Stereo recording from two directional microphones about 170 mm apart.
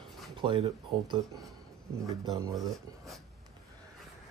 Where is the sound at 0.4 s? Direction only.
30° right (ahead or behind).